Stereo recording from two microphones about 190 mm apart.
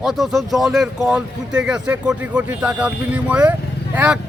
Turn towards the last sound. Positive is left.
turn(degrees=-5)  # may be behind; listen again after turning